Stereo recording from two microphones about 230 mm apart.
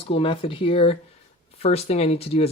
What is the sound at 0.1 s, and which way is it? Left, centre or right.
Speech, left.